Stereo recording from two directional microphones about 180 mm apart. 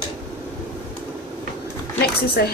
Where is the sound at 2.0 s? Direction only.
60° left (ahead or behind).